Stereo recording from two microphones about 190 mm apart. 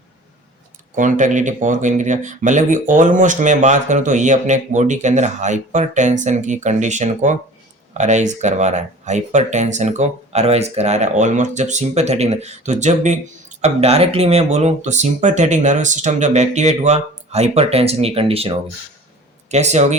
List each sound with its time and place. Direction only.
0.9 s speech: 40° right (ahead or behind)